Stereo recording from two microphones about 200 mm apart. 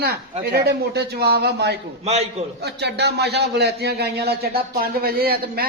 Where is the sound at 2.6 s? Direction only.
55° right (ahead or behind).